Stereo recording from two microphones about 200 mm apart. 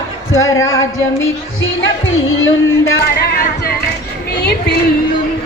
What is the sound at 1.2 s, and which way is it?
Speech, 70° left (ahead or behind).